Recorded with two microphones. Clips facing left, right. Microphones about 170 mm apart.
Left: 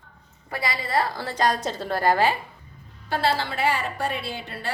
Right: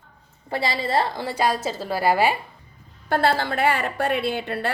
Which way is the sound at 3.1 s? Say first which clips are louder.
Right 3 dB; 55° right (ahead or behind).